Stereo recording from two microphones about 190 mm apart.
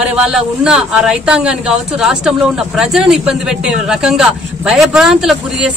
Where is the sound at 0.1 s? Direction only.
5° right (ahead or behind).